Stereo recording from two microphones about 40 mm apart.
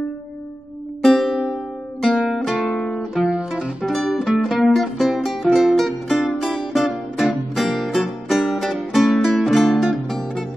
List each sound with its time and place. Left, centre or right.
1.0 s music: centre
1.5 s music: centre
2.7 s guitar: centre
3.3 s music: right
3.8 s music: centre
4.4 s music: centre